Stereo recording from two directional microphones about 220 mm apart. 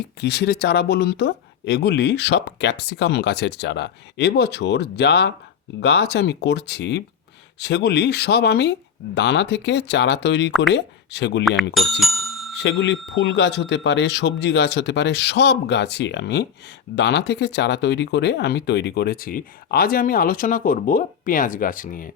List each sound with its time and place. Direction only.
0.2 s speech: 50° left (ahead or behind)
11.7 s bicycle bell: centre (ahead or behind)
12.6 s speech: 55° left (ahead or behind); by 22.1 s 40° left (ahead or behind)